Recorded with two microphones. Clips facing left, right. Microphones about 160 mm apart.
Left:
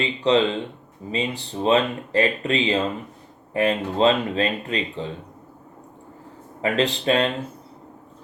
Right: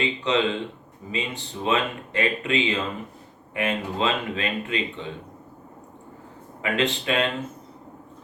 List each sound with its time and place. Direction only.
0.0 s speech: 35° left (ahead or behind)
6.6 s speech: 35° left (ahead or behind)